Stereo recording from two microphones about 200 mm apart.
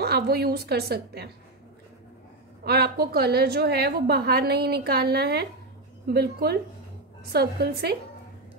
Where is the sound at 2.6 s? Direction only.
50° right (ahead or behind).